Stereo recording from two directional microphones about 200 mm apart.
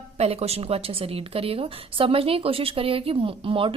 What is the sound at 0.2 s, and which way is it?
A woman's voice, 30° right (ahead or behind).